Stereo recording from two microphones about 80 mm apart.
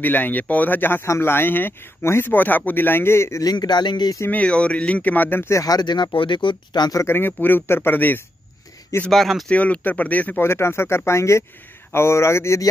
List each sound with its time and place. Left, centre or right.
0.0 s speech: left
3.4 s a man's voice: left
4.3 s speech: centre
5.5 s speech: left
5.8 s speech: left
7.0 s speech: left
9.1 s speech: centre
9.5 s speech: centre
10.4 s speech: left